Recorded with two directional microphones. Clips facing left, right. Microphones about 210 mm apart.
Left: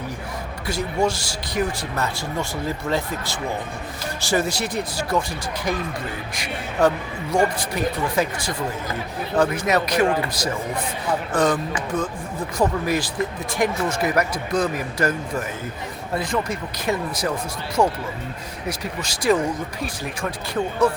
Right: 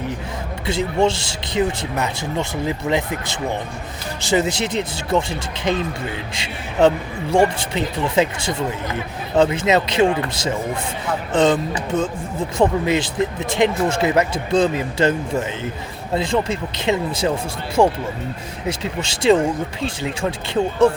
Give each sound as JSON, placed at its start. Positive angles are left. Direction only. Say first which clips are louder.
{"t": 0.7, "sound": "speech", "louder": "right 4 dB", "side_deg": -25}